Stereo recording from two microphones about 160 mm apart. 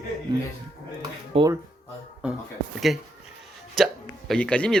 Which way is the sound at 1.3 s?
35° right (ahead or behind).